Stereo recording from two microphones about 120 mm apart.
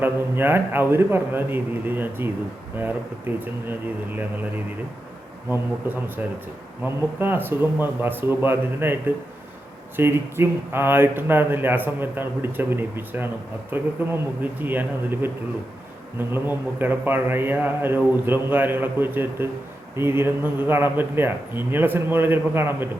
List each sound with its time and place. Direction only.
0.0 s speech: 20° right (ahead or behind)
5.8 s speech: 15° right (ahead or behind)